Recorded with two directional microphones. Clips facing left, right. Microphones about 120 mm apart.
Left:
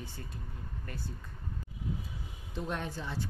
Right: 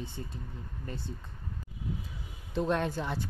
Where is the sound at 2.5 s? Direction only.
90° right; by 3.2 s 60° right (ahead or behind).